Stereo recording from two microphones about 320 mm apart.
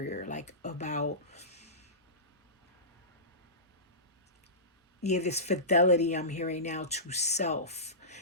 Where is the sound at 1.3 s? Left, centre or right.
Centre.